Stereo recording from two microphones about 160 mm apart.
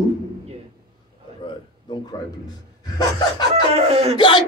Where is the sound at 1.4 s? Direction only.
30° left (ahead or behind).